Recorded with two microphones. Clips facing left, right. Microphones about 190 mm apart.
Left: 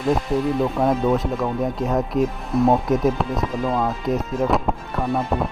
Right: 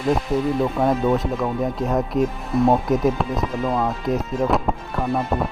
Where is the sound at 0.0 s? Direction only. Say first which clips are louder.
Even; centre (ahead or behind).